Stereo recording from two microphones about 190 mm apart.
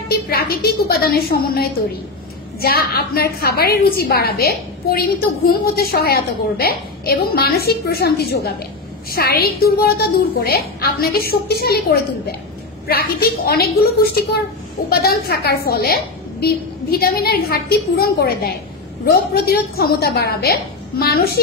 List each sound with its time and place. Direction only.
0.3 s a woman's voice: 55° left (ahead or behind)
14.9 s a woman's voice: 55° left (ahead or behind)